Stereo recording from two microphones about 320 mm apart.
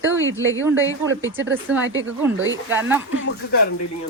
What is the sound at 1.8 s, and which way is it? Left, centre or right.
Speech, right.